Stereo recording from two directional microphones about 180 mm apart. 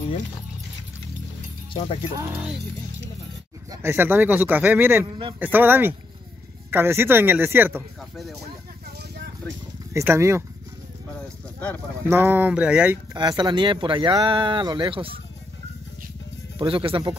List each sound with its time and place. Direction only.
1.7 s speech: 30° left (ahead or behind)
2.1 s speech: 15° right (ahead or behind)
3.7 s speech: 15° right (ahead or behind)
5.0 s speech: 30° right (ahead or behind)
5.4 s speech: 10° right (ahead or behind)
9.9 s speech: 15° right (ahead or behind)
11.1 s a sound: 5° left (ahead or behind)
12.1 s speech: 10° right (ahead or behind)
13.1 s speech: 25° right (ahead or behind)
16.5 s speech: 30° right (ahead or behind)